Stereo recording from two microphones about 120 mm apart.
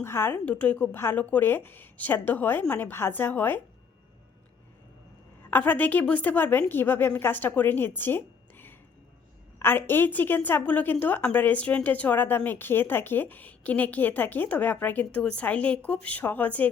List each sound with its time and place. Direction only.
0.0 s a woman's voice: 20° left (ahead or behind)
5.5 s a woman's voice: 15° left (ahead or behind)